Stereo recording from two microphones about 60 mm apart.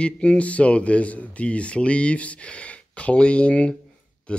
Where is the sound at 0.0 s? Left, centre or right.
Centre.